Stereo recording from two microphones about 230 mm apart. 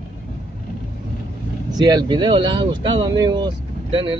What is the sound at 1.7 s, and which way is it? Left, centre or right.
Speech, centre.